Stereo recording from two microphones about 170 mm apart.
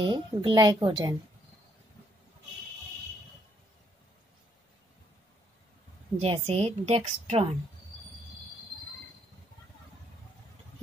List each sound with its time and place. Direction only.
0.0 s a woman's voice: 30° right (ahead or behind)
6.1 s a woman's voice: 40° right (ahead or behind)